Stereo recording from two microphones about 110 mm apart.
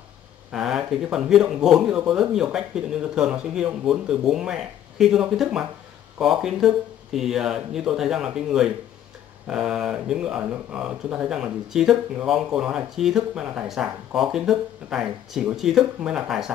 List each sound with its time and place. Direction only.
0.5 s speech: 5° right (ahead or behind)